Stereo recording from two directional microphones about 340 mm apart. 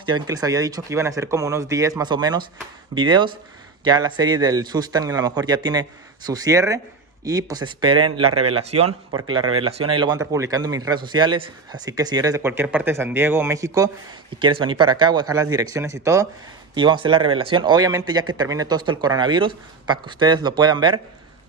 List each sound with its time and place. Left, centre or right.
0.0 s a man's voice: centre